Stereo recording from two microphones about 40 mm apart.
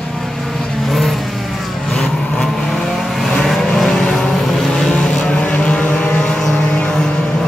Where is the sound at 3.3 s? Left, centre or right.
Centre.